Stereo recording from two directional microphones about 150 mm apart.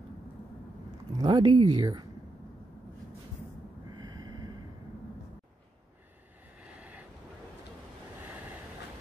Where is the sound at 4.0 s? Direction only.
25° right (ahead or behind).